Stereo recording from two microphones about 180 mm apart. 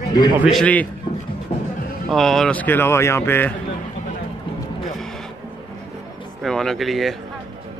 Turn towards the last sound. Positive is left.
turn(degrees=0)  # may be behind; listen again after turning